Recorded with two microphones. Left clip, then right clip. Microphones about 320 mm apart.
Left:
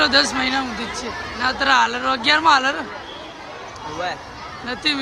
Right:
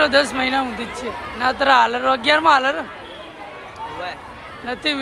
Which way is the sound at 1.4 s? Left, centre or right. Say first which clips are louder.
Right 2 dB; centre.